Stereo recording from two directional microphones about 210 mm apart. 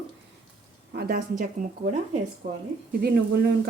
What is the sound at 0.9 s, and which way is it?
Speech, 45° right (ahead or behind).